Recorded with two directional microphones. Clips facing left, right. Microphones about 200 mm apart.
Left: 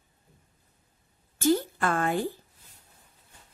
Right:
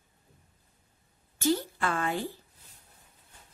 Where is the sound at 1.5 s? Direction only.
50° left (ahead or behind).